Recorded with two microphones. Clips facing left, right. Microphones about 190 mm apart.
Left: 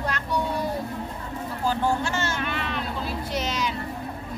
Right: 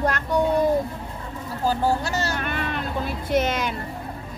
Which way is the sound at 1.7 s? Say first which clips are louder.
Right 2 dB; 40° right (ahead or behind).